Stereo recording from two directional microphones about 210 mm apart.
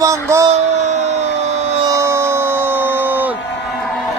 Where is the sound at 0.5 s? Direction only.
30° right (ahead or behind).